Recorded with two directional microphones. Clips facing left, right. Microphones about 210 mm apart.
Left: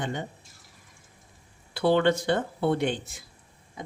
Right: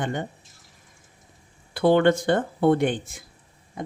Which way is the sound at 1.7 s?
50° right (ahead or behind).